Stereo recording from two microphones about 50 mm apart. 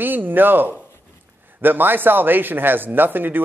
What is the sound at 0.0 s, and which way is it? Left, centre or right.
Speech, right.